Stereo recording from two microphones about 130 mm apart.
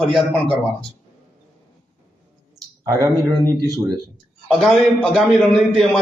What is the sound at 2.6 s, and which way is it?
Speech, 25° right (ahead or behind).